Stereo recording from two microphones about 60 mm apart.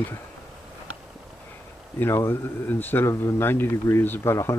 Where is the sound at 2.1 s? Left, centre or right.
Left.